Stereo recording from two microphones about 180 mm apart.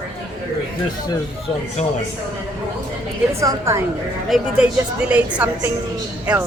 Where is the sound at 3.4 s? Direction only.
20° right (ahead or behind).